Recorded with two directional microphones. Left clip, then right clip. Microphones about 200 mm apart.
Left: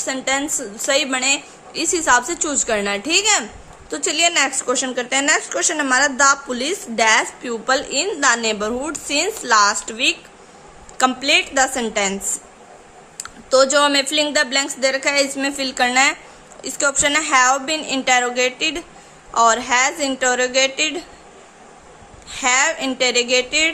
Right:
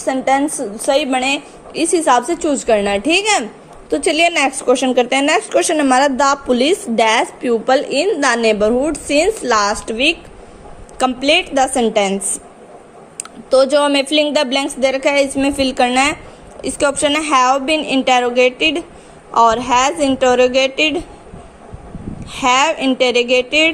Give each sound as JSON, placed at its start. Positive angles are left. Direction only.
{"t": 0.0, "sound": "a woman's voice", "side_deg": 0}
{"t": 13.5, "sound": "a woman's voice", "side_deg": 0}
{"t": 22.3, "sound": "a woman's voice", "side_deg": -10}